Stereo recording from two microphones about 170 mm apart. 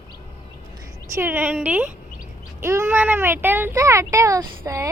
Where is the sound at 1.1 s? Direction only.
15° right (ahead or behind).